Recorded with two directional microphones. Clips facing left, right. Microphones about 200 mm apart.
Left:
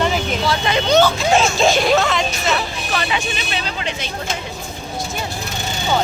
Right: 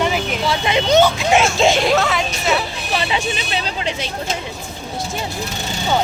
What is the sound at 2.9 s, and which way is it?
Vehicle, 25° right (ahead or behind).